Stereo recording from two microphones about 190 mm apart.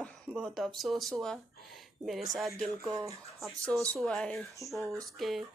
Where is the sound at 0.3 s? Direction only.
5° right (ahead or behind).